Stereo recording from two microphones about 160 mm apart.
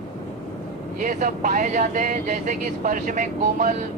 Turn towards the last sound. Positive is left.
turn(degrees=-55)  # may be behind; listen again after turning